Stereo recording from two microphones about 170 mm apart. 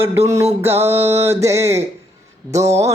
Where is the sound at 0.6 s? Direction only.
15° right (ahead or behind).